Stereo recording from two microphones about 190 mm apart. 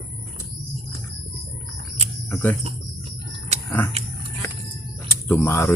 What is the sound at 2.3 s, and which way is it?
Speech, 10° left (ahead or behind).